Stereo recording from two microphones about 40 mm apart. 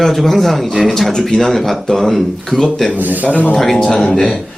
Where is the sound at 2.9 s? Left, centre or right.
Right.